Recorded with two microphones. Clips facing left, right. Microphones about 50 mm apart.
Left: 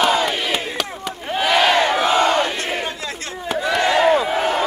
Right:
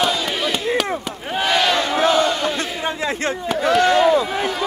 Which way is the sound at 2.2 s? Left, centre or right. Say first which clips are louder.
Left 2 dB; left.